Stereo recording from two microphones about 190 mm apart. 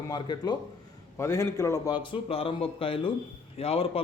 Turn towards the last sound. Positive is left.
turn(degrees=30)  # may be behind; listen again after turning